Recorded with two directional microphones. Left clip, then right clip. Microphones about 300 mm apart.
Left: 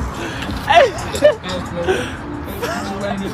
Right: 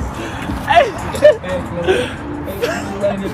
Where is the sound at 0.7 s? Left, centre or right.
Left.